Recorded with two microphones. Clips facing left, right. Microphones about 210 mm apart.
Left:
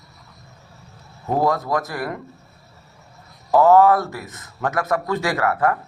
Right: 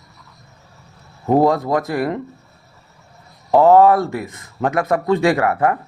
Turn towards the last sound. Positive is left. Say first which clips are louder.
# right 4 dB
turn(degrees=-25)  # may be behind; listen again after turning